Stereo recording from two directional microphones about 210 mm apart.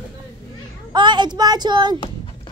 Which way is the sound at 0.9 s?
20° right (ahead or behind).